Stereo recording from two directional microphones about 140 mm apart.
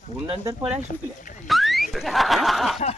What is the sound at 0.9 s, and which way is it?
Speech, 75° left (ahead or behind).